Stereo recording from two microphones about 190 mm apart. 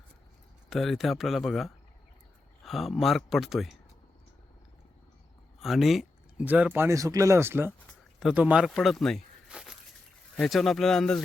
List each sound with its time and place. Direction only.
0.7 s speech: centre (ahead or behind)
5.5 s speech: centre (ahead or behind)